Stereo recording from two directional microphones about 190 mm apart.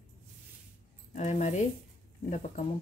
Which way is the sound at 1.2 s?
35° left (ahead or behind).